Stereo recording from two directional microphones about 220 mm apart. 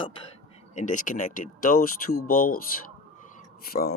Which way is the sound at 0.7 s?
35° left (ahead or behind).